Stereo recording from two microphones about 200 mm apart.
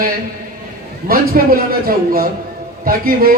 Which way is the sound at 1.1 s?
45° right (ahead or behind).